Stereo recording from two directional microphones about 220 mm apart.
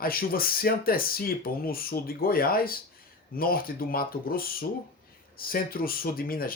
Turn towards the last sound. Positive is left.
turn(degrees=40)  # may be behind; listen again after turning